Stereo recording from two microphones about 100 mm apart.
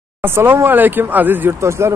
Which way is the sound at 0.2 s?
25° right (ahead or behind).